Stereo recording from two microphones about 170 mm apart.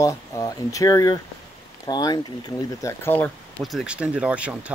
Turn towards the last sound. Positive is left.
turn(degrees=-5)  # may be behind; listen again after turning